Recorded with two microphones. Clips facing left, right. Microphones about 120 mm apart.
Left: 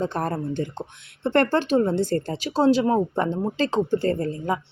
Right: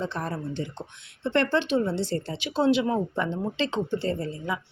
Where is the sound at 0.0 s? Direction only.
50° left (ahead or behind).